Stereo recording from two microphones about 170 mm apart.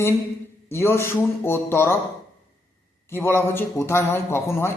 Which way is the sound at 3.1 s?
10° left (ahead or behind).